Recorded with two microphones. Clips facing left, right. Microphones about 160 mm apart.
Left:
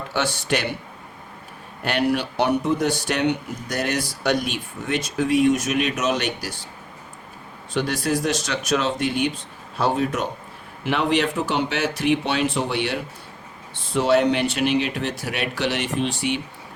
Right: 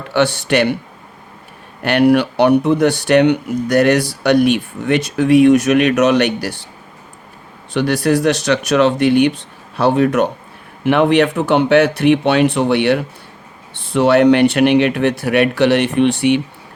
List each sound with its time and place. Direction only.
0.1 s speech: 65° right (ahead or behind)
1.8 s speech: 65° right (ahead or behind)
7.7 s speech: 65° right (ahead or behind)